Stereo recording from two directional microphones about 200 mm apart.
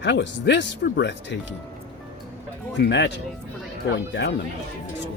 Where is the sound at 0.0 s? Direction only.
60° left (ahead or behind).